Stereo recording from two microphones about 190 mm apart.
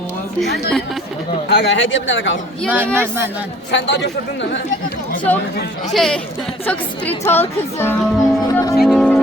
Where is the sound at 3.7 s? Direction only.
70° left (ahead or behind).